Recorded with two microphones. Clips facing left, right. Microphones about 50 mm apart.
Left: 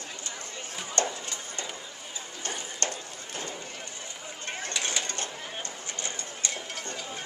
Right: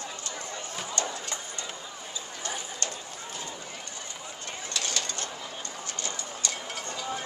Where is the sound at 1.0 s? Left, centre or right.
Left.